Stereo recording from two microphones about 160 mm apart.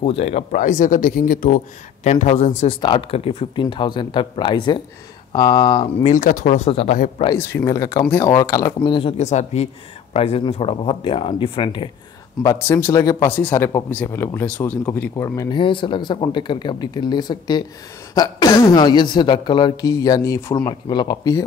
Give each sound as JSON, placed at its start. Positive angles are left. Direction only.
{"t": 0.0, "sound": "speech", "side_deg": 40}
{"t": 2.0, "sound": "speech", "side_deg": 45}
{"t": 6.0, "sound": "speech", "side_deg": 55}
{"t": 7.3, "sound": "speech", "side_deg": 15}
{"t": 12.4, "sound": "speech", "side_deg": 15}
{"t": 15.6, "sound": "speech", "side_deg": 30}